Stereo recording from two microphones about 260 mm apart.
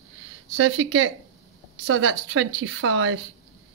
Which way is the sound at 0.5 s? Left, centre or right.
Right.